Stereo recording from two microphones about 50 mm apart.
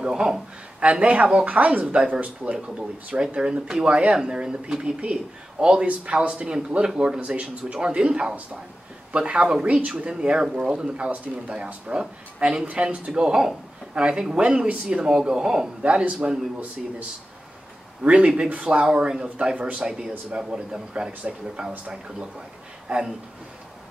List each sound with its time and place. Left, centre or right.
0.0 s speech: centre
15.8 s speech: right
18.0 s speech: centre
19.2 s speech: right
19.8 s speech: centre
22.9 s speech: right